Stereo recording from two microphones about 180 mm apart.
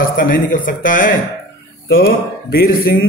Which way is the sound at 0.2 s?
50° left (ahead or behind).